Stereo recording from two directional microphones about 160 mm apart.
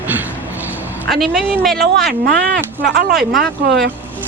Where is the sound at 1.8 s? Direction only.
80° right.